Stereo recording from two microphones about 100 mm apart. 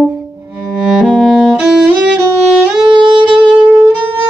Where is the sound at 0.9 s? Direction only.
5° left (ahead or behind).